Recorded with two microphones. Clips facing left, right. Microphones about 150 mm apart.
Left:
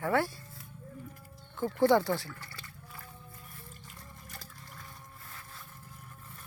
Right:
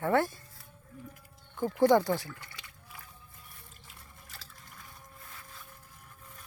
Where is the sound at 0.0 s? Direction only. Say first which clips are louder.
Right 2 dB; 20° right (ahead or behind).